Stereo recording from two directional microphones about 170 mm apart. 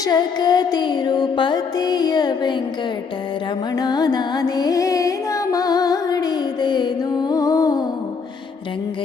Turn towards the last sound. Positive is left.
turn(degrees=20)  # may be behind; listen again after turning